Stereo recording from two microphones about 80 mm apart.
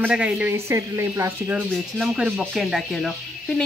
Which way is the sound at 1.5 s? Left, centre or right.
Centre.